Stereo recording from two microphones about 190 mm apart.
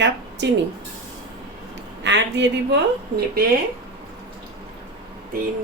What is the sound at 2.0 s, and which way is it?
A woman's voice, 70° right (ahead or behind).